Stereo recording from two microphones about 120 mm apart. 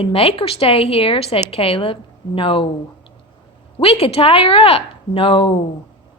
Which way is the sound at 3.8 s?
55° left (ahead or behind).